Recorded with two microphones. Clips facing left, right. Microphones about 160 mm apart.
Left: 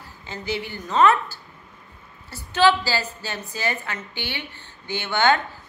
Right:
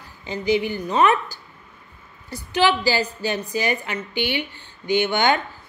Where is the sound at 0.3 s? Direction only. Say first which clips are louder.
Right 8 dB; 15° right (ahead or behind).